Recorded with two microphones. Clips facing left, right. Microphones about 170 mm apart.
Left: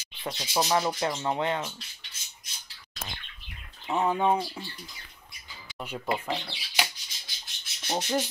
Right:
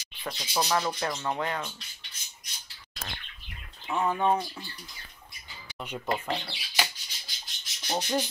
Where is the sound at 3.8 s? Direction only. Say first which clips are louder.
Left 1 dB; 20° left (ahead or behind).